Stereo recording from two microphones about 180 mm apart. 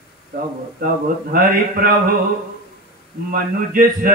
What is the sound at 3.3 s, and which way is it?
Mantra, 50° right (ahead or behind).